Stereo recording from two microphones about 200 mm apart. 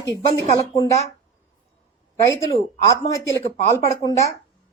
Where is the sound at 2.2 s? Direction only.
15° left (ahead or behind).